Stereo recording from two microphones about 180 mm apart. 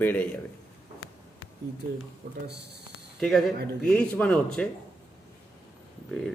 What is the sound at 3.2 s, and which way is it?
A man's voice, centre (ahead or behind).